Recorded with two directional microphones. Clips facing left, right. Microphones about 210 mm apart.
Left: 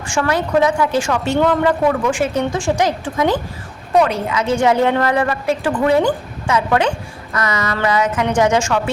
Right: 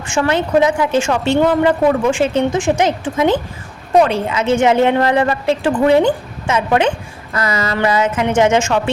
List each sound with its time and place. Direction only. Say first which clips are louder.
0.1 s a woman's voice: right 2 dB; 25° right (ahead or behind)
1.4 s a man's voice: right 2 dB; 15° right (ahead or behind)
1.9 s a woman's voice: right 3 dB; 25° right (ahead or behind)